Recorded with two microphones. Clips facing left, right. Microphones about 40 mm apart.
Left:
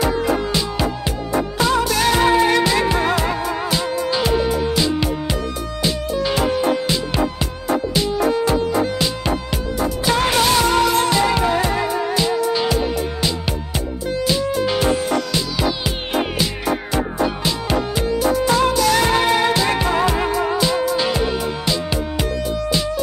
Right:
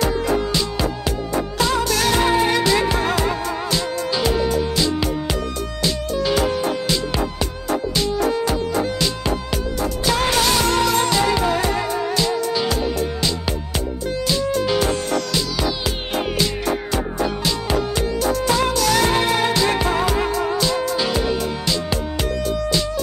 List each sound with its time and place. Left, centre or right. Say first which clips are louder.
0.0 s music: left 1 dB; centre
8.3 s music: left 3 dB; left
8.7 s music: left 2 dB; centre